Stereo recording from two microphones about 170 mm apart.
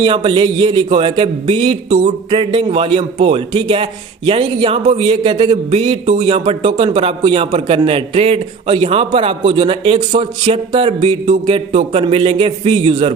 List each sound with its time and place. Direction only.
0.0 s a man's voice: 30° right (ahead or behind)